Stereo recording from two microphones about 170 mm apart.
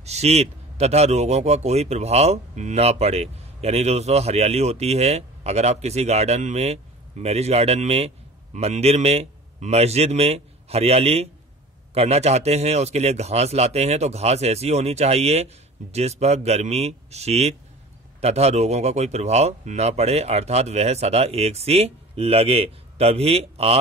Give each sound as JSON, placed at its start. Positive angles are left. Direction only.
{"t": 0.0, "sound": "speech", "side_deg": -40}